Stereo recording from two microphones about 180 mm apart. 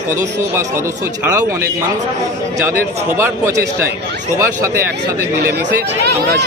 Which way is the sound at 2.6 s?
10° right (ahead or behind).